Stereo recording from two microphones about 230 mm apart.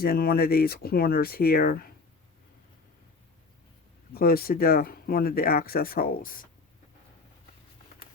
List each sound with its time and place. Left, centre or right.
0.0 s speech: left
4.1 s speech: left